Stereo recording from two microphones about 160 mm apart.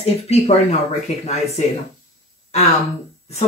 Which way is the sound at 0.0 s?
40° left (ahead or behind).